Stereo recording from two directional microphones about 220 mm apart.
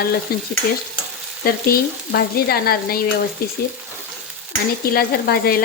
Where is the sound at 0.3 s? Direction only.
45° left (ahead or behind).